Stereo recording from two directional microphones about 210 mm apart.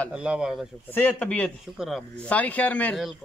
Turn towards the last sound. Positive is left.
turn(degrees=5)  # may be behind; listen again after turning